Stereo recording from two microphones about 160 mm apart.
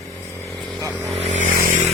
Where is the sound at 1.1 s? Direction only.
45° right (ahead or behind).